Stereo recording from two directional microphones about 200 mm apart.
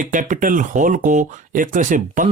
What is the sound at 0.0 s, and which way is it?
Speech, 40° right (ahead or behind).